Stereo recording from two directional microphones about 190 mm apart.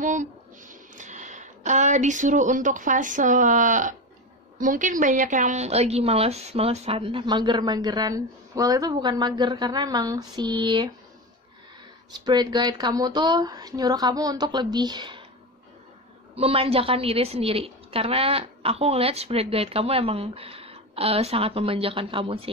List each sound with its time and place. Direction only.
0.0 s a woman's voice: 40° right (ahead or behind); by 10.9 s 25° right (ahead or behind)
12.3 s a woman's voice: 20° right (ahead or behind)
16.3 s a woman's voice: 30° right (ahead or behind)